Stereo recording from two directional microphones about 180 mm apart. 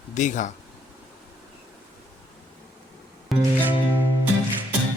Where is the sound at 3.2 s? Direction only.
10° right (ahead or behind).